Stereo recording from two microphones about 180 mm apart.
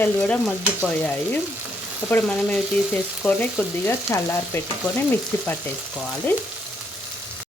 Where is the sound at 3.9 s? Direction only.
15° left (ahead or behind).